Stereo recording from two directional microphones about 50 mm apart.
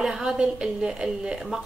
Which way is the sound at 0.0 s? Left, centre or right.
Centre.